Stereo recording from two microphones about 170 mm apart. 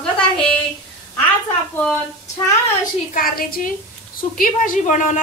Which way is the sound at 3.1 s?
60° left (ahead or behind).